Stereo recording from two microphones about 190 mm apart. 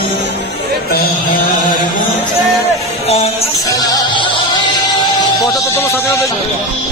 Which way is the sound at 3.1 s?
35° left (ahead or behind).